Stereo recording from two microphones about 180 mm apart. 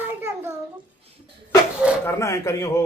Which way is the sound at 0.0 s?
10° right (ahead or behind).